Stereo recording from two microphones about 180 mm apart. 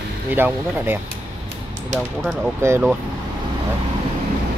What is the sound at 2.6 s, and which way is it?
Speech, 15° right (ahead or behind).